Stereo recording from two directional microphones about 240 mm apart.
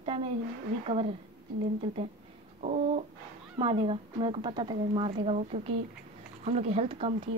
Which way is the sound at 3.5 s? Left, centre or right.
Right.